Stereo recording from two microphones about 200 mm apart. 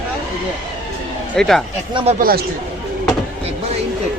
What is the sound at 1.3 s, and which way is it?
Speech, centre (ahead or behind).